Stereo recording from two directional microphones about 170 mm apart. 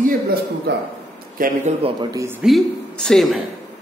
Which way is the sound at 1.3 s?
55° right (ahead or behind).